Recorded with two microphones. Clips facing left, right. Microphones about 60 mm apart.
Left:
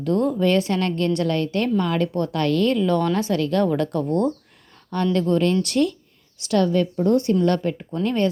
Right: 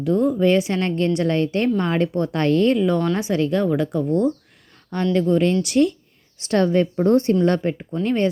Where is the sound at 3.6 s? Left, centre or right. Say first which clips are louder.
Right 1 dB; centre.